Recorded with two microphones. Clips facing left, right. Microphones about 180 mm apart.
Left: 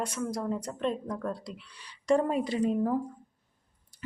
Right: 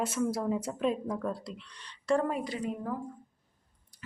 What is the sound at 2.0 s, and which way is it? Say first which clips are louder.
Speech: left 3 dB; 20° left (ahead or behind).